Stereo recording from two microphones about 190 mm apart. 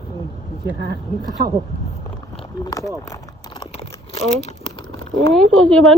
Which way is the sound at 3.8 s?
35° left (ahead or behind).